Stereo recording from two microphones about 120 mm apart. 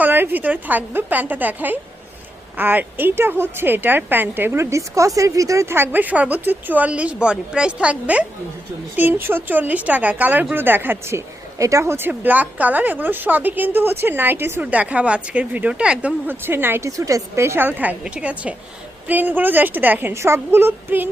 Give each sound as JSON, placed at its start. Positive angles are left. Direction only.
{"t": 0.0, "sound": "speech", "side_deg": -15}